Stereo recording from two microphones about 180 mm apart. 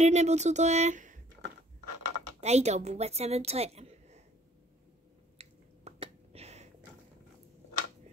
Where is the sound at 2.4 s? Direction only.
35° right (ahead or behind).